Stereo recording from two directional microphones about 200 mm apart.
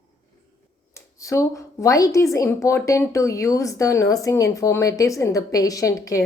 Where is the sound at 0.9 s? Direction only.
15° left (ahead or behind).